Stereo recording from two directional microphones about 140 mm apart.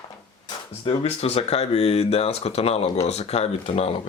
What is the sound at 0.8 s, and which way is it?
Speech, 45° left (ahead or behind).